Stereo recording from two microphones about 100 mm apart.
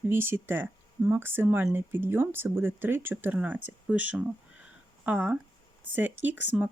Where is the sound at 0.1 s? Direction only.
20° right (ahead or behind).